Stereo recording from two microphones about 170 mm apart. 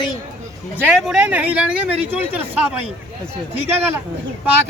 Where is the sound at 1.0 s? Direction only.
5° right (ahead or behind).